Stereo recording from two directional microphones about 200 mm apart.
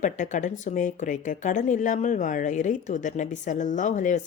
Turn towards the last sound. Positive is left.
turn(degrees=40)  # may be behind; listen again after turning